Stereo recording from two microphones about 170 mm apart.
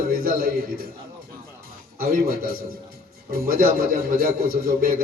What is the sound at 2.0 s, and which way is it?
Speech, 60° right (ahead or behind).